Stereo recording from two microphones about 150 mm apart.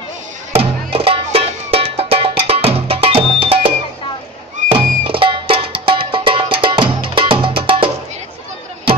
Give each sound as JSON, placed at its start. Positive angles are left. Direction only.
{"t": 0.9, "sound": "music", "side_deg": -40}